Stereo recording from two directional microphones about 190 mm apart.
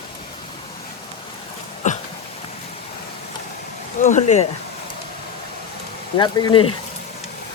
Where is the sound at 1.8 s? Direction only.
40° left (ahead or behind).